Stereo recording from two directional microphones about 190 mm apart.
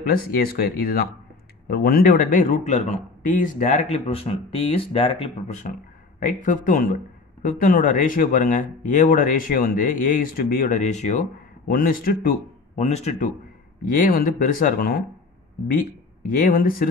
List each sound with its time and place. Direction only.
0.0 s speech: 50° left (ahead or behind); by 5.7 s 30° left (ahead or behind)
6.1 s speech: 45° left (ahead or behind)
13.9 s speech: 50° left (ahead or behind)